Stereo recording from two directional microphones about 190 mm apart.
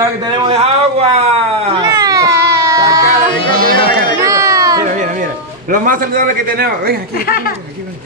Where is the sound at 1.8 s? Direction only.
15° right (ahead or behind).